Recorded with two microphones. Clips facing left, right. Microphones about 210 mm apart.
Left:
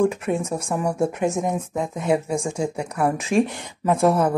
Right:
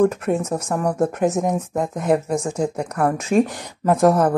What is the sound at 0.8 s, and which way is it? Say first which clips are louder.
Speech: right 2 dB; 10° left (ahead or behind).